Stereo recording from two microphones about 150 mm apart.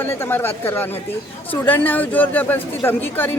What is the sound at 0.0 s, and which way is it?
Speech, 15° left (ahead or behind).